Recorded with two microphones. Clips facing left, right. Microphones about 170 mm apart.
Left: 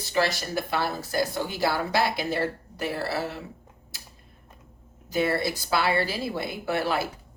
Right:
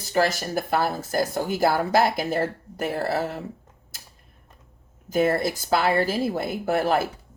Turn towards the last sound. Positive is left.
turn(degrees=-45)  # may be behind; listen again after turning